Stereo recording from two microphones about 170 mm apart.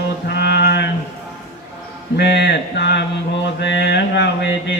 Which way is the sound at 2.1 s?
80° left.